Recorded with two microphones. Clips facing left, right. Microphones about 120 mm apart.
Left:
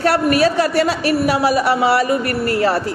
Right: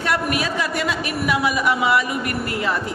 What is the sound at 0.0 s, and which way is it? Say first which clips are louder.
A man's voice: left 8 dB; 40° left (ahead or behind).